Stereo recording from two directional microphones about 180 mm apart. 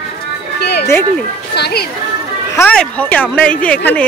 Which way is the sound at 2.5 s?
10° left (ahead or behind).